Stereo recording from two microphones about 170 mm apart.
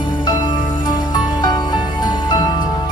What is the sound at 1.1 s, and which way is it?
Music, 25° left (ahead or behind).